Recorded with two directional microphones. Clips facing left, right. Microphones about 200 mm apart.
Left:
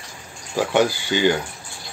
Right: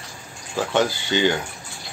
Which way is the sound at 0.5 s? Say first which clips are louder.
Left 2 dB; 10° left (ahead or behind).